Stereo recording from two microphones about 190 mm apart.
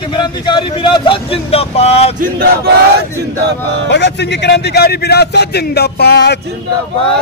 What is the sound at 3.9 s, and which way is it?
A man's voice, 65° left (ahead or behind).